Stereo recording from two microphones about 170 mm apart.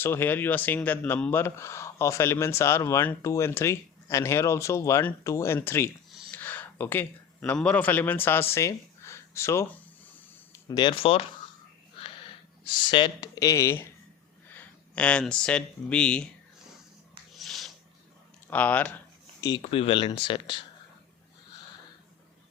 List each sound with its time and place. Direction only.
0.0 s speech: 10° left (ahead or behind)
10.7 s speech: 25° left (ahead or behind)
12.6 s speech: 30° left (ahead or behind); by 16.3 s 5° left (ahead or behind)
17.3 s a sound: centre (ahead or behind)
18.5 s speech: 10° left (ahead or behind)
19.4 s speech: 20° left (ahead or behind)
19.7 s speech: 35° left (ahead or behind)